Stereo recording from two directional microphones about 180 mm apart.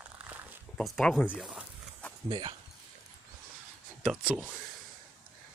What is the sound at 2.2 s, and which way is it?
Speech, 25° right (ahead or behind).